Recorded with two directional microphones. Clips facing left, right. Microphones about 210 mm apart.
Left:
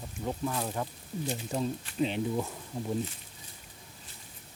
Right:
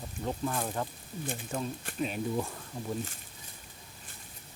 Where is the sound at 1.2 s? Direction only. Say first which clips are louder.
Left 3 dB; 50° right (ahead or behind).